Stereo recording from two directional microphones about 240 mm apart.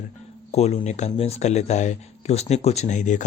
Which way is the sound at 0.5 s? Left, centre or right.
Left.